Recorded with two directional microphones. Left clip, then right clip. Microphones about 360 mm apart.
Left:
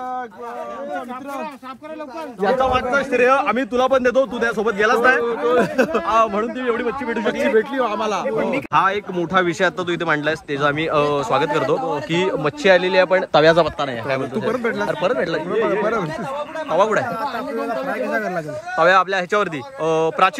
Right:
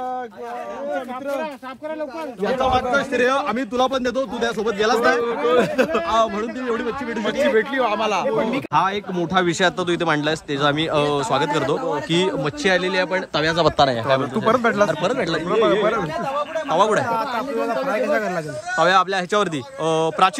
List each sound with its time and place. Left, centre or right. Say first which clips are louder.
2.4 s a man's voice: left 2 dB; centre
8.3 s speech: even; right
8.7 s a man's voice: left 2 dB; centre
13.7 s a man's voice: right 6 dB; centre